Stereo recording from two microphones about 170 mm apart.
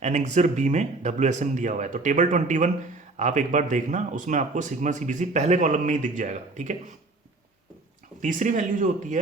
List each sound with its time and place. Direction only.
0.0 s speech: 45° right (ahead or behind)
8.2 s speech: 50° right (ahead or behind)